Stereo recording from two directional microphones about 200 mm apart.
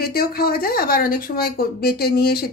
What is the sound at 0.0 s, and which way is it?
Speech, 50° left (ahead or behind).